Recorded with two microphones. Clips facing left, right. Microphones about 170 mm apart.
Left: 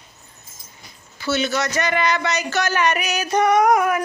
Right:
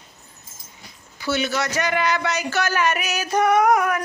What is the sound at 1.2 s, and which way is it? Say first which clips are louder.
Speech: left 2 dB; 10° right (ahead or behind).